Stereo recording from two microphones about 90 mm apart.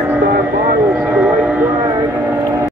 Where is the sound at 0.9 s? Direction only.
15° right (ahead or behind).